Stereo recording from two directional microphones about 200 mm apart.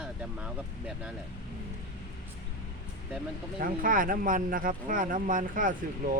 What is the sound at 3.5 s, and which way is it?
Speech, 45° right (ahead or behind).